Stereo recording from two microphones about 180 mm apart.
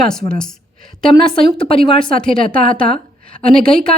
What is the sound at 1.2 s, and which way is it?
Speech, 30° left (ahead or behind).